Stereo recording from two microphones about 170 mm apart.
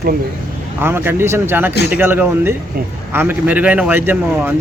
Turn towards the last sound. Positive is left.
turn(degrees=-10)  # may be behind; listen again after turning